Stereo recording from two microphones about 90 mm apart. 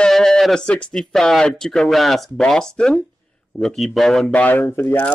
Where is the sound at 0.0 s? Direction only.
5° left (ahead or behind).